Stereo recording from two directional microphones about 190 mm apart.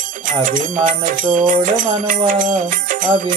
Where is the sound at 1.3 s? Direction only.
45° right (ahead or behind).